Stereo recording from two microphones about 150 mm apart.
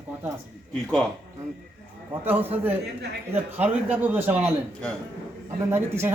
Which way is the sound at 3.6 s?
10° right (ahead or behind).